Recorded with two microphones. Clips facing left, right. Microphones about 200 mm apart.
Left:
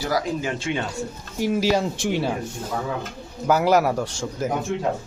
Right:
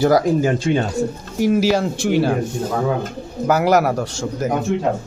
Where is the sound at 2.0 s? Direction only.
5° right (ahead or behind).